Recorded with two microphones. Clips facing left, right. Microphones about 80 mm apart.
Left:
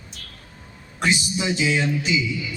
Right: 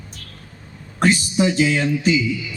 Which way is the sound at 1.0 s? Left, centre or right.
Right.